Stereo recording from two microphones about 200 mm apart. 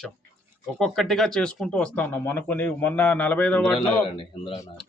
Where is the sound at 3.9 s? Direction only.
25° left (ahead or behind).